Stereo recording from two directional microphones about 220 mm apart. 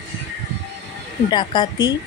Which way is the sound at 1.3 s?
20° left (ahead or behind).